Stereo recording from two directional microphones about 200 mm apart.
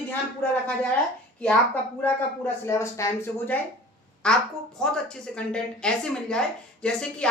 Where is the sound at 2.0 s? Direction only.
10° left (ahead or behind).